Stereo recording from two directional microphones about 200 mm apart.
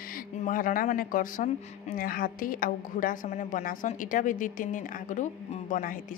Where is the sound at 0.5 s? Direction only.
45° left (ahead or behind).